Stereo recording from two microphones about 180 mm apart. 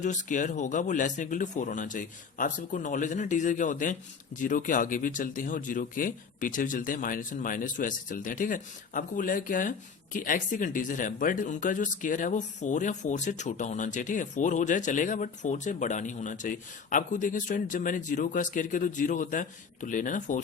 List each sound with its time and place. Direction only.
0.0 s speech: 45° left (ahead or behind)